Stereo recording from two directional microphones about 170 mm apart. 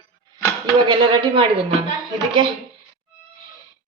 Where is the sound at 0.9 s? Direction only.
30° right (ahead or behind).